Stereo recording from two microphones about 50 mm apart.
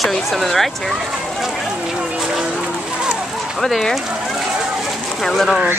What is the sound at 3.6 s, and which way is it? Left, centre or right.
Speech, centre.